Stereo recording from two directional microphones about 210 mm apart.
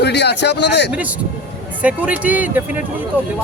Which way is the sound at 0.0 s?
55° left (ahead or behind).